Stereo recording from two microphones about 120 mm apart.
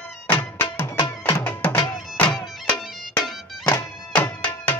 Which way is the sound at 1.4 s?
15° left (ahead or behind).